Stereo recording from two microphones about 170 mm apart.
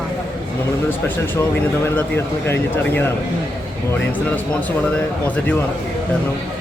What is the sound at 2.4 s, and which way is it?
Speech, 10° left (ahead or behind).